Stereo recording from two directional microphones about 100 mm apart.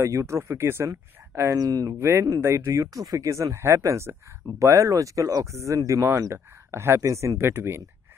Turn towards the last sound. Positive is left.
turn(degrees=-25)  # may be behind; listen again after turning